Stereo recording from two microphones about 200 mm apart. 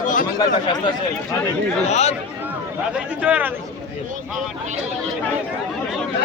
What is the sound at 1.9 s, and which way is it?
Speech, 35° left (ahead or behind).